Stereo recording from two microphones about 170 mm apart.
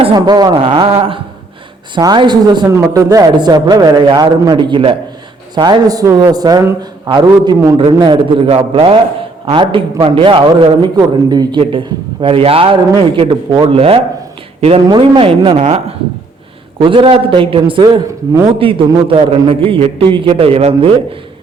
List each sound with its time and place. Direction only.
0.2 s a man's voice: 25° right (ahead or behind)
16.8 s a man's voice: 30° right (ahead or behind)